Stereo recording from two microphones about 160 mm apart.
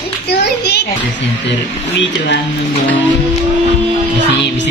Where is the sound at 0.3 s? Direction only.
90° left.